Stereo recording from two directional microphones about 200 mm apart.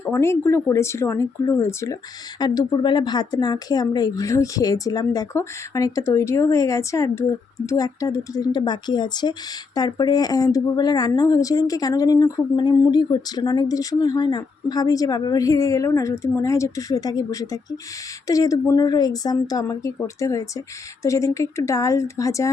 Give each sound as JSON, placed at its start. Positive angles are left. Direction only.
{"t": 0.0, "sound": "a woman's voice", "side_deg": 10}